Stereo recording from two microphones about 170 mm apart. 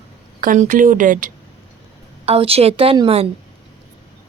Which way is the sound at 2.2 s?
35° right (ahead or behind).